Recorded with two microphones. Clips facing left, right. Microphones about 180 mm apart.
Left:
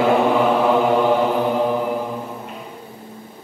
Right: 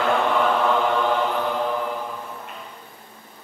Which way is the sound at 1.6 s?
15° left (ahead or behind).